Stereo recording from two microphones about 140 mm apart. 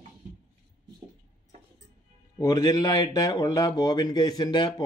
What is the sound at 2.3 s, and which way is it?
Speech, 25° left (ahead or behind).